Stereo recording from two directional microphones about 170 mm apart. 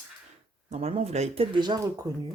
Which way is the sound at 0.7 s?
40° right (ahead or behind).